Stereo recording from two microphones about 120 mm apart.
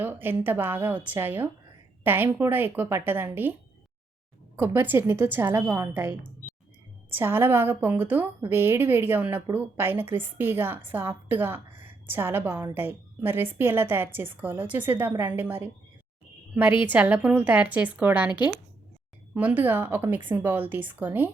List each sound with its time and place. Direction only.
0.0 s a woman's voice: 15° right (ahead or behind)
4.5 s a woman's voice: 20° right (ahead or behind)